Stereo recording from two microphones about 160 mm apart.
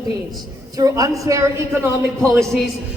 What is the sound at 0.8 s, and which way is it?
Speech, 20° right (ahead or behind).